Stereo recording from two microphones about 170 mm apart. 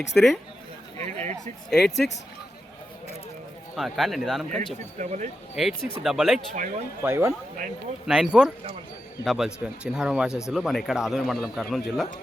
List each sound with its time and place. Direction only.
0.1 s speech: 5° left (ahead or behind)
0.9 s speech: 40° right (ahead or behind)
1.7 s speech: centre (ahead or behind)
3.8 s speech: centre (ahead or behind)
4.9 s speech: 45° right (ahead or behind)
5.6 s speech: centre (ahead or behind)
6.5 s speech: 45° right (ahead or behind)
7.0 s speech: 15° right (ahead or behind)
8.0 s speech: 5° right (ahead or behind)